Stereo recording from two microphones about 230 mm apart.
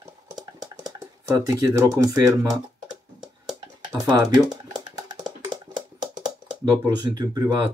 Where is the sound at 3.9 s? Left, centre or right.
Centre.